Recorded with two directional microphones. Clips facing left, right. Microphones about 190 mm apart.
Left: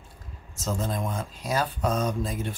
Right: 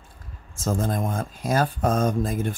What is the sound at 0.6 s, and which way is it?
Speech, 50° right (ahead or behind).